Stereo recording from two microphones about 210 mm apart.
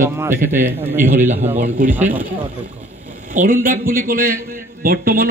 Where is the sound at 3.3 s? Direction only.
40° right (ahead or behind).